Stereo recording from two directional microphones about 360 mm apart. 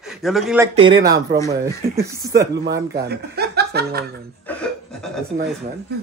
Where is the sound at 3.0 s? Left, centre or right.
Right.